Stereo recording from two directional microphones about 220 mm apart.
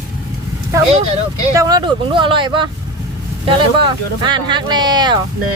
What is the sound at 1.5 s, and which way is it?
Speech, 15° right (ahead or behind).